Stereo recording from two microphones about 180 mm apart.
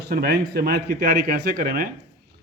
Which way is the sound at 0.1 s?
60° right (ahead or behind).